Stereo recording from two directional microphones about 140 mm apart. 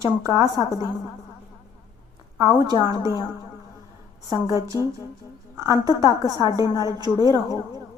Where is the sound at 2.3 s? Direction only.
20° right (ahead or behind).